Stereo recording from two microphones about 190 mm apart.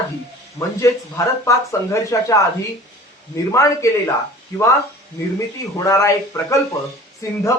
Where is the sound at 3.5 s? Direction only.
15° left (ahead or behind).